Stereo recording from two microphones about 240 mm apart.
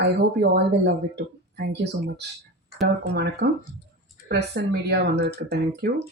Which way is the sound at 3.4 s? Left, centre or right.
Right.